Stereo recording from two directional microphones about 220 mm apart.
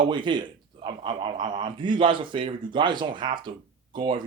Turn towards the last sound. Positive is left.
turn(degrees=-20)  # may be behind; listen again after turning